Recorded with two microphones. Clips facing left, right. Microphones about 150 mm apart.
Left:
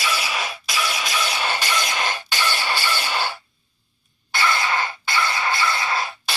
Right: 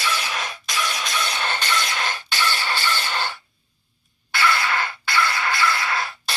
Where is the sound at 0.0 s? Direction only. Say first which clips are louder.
Left 1 dB; 10° left (ahead or behind).